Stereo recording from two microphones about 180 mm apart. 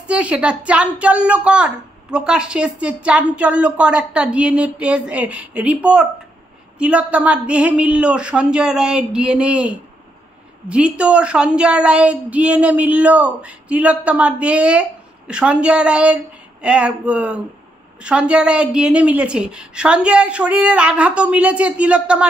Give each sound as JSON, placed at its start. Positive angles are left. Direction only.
{"t": 0.0, "sound": "a woman's voice", "side_deg": -5}